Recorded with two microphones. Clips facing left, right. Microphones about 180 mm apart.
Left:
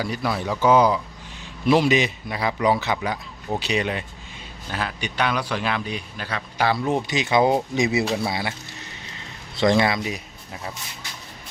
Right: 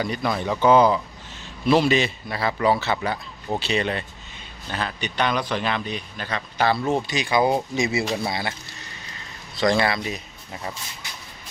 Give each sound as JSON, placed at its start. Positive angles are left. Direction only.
{"t": 0.0, "sound": "a man's voice", "side_deg": 5}
{"t": 9.6, "sound": "speech", "side_deg": 20}